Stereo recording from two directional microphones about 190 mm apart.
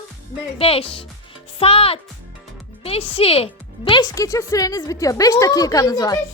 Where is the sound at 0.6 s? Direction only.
30° left (ahead or behind).